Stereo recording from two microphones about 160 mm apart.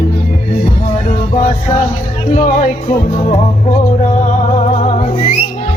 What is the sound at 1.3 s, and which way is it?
Music, 45° left (ahead or behind).